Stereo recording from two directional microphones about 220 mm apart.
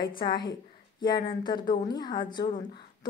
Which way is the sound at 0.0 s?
20° left (ahead or behind).